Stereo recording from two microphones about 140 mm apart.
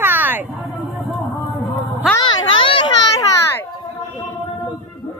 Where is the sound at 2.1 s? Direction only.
35° left (ahead or behind).